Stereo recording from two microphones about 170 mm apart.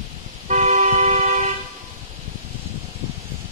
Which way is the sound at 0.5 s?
45° right (ahead or behind).